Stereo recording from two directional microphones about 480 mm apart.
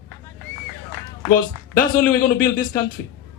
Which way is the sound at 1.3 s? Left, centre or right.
Centre.